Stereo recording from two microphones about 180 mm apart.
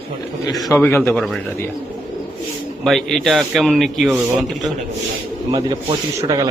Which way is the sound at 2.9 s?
Centre (ahead or behind).